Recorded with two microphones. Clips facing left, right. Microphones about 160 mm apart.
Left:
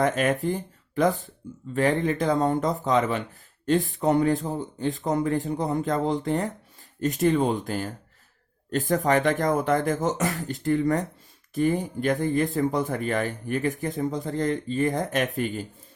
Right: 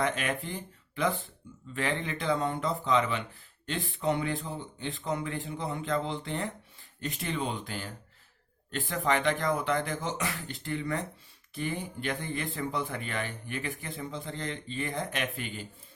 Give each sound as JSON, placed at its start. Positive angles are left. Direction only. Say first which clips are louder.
{"t": 0.0, "sound": "speech", "louder": "left 8 dB", "side_deg": 45}